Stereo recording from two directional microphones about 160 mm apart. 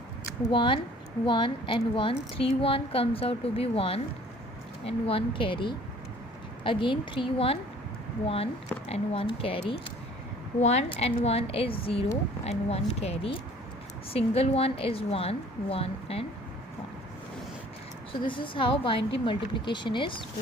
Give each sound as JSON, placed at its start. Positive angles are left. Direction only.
{"t": 0.4, "sound": "a woman's voice", "side_deg": 35}
{"t": 8.9, "sound": "a woman's voice", "side_deg": 35}
{"t": 18.2, "sound": "a woman's voice", "side_deg": 30}